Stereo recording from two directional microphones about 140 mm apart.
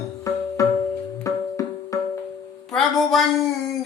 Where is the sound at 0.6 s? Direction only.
25° left (ahead or behind).